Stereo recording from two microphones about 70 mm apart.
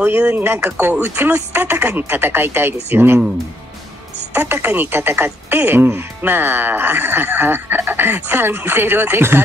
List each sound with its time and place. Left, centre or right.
0.0 s a woman's voice: right
4.3 s a woman's voice: right